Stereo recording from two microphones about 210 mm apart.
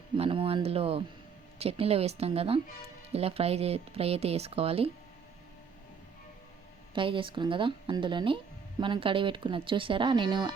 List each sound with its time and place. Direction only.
0.2 s speech: 25° right (ahead or behind)
6.9 s speech: 25° right (ahead or behind)